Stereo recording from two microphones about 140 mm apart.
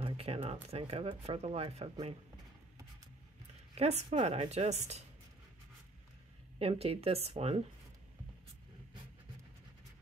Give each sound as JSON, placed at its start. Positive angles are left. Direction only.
{"t": 0.0, "sound": "speech", "side_deg": -45}
{"t": 3.7, "sound": "speech", "side_deg": -45}
{"t": 6.6, "sound": "speech", "side_deg": -45}